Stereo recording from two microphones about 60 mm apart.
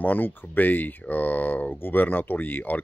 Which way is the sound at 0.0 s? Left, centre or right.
Left.